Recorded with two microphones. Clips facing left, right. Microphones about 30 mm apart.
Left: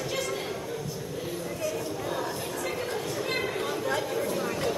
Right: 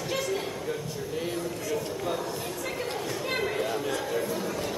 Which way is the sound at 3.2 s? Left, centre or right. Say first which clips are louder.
Right 2 dB; centre.